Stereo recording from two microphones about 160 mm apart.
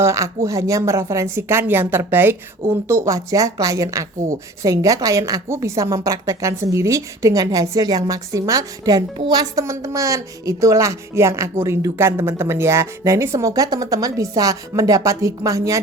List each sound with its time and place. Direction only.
0.0 s speech: 20° right (ahead or behind)